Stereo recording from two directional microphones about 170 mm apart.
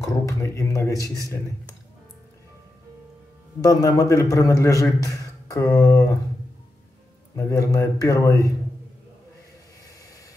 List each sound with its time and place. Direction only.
0.0 s a man's voice: 20° left (ahead or behind)
3.6 s a man's voice: 20° left (ahead or behind)
7.3 s a man's voice: 20° left (ahead or behind)